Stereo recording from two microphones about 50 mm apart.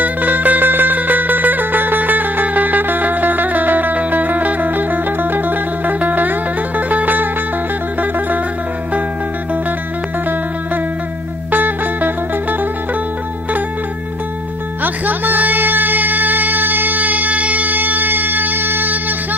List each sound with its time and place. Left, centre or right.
0.0 s music: right
11.5 s music: right
14.8 s music: right